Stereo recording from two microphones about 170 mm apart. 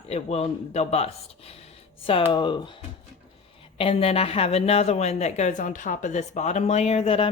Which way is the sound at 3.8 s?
35° left (ahead or behind).